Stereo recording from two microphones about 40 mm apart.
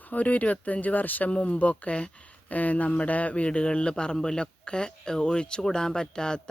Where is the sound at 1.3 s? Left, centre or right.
Left.